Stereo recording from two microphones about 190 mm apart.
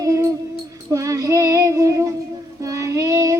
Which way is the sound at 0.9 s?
15° right (ahead or behind).